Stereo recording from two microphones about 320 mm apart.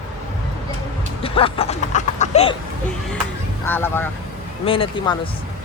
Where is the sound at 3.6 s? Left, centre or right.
Centre.